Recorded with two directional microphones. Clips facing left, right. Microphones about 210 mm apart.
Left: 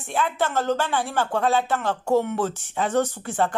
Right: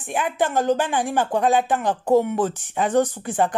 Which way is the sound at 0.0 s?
15° right (ahead or behind).